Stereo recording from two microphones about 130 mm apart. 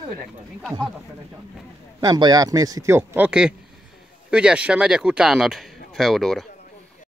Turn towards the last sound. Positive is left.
turn(degrees=0)  # may be behind; listen again after turning